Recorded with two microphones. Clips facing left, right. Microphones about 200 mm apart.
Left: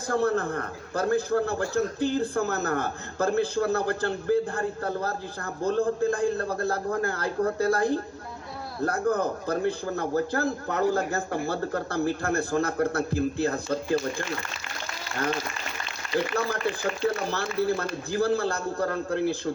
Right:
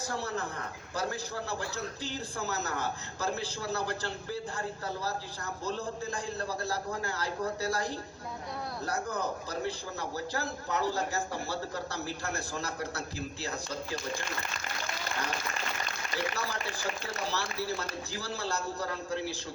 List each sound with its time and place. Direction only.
0.1 s a man's voice: 55° left (ahead or behind)
16.0 s a sound: 15° right (ahead or behind)
17.1 s a man's voice: 55° left (ahead or behind)